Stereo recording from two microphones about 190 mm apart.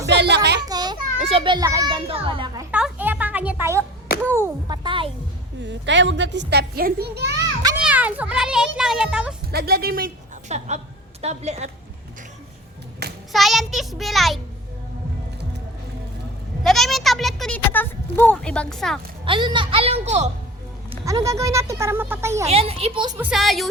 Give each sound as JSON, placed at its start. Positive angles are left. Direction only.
{"t": 0.1, "sound": "a sound", "side_deg": -60}
{"t": 0.6, "sound": "children playing", "side_deg": -20}
{"t": 1.2, "sound": "a child's voice", "side_deg": -30}
{"t": 2.7, "sound": "a child's voice", "side_deg": -10}
{"t": 5.6, "sound": "a child's voice", "side_deg": -70}
{"t": 7.8, "sound": "a child's voice", "side_deg": -5}
{"t": 9.5, "sound": "a woman's voice", "side_deg": -55}
{"t": 10.5, "sound": "a woman's voice", "side_deg": -35}
{"t": 13.3, "sound": "a child's voice", "side_deg": 0}
{"t": 16.6, "sound": "a sound", "side_deg": 0}
{"t": 19.2, "sound": "a woman's voice", "side_deg": -25}
{"t": 21.0, "sound": "speech", "side_deg": -15}
{"t": 22.4, "sound": "a woman's voice", "side_deg": -30}
{"t": 23.1, "sound": "a child's voice", "side_deg": -5}